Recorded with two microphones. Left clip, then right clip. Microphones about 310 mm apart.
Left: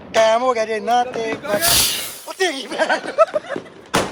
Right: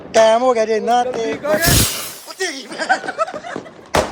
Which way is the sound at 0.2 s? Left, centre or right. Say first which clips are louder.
Right 3 dB; centre.